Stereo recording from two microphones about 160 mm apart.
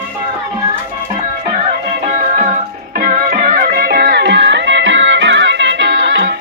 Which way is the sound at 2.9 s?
60° right (ahead or behind).